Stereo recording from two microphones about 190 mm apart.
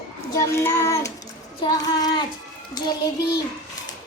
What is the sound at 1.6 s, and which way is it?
Speech, 20° left (ahead or behind).